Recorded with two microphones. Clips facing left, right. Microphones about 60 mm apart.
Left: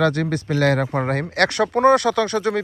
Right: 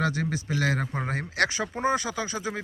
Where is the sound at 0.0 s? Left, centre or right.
Left.